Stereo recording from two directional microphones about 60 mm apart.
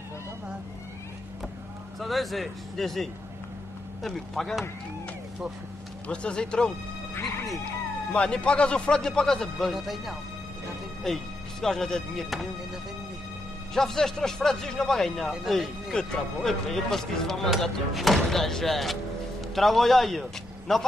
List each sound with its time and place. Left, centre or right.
2.0 s speech: centre
6.0 s a man's voice: centre
7.2 s speech: left
8.1 s a man's voice: centre
13.7 s a man's voice: centre